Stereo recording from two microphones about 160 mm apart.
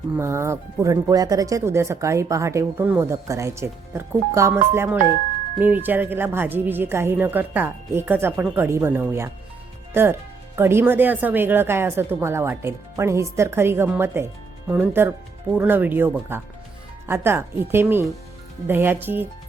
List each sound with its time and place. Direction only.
0.2 s speech: 15° right (ahead or behind)